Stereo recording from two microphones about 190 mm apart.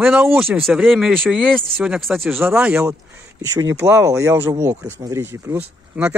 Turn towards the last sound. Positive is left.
turn(degrees=-5)  # may be behind; listen again after turning